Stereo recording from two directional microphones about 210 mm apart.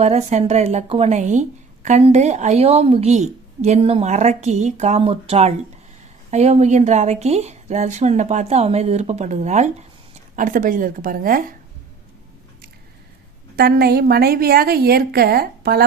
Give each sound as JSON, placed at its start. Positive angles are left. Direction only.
{"t": 0.0, "sound": "a woman's voice", "side_deg": -30}
{"t": 13.6, "sound": "a woman's voice", "side_deg": -50}